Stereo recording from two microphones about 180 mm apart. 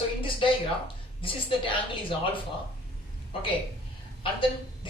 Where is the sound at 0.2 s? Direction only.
30° left (ahead or behind).